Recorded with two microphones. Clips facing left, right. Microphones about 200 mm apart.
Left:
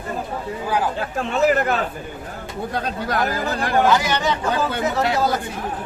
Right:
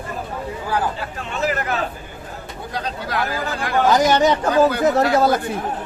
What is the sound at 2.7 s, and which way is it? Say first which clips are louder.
Speech: left 1 dB; 45° left (ahead or behind).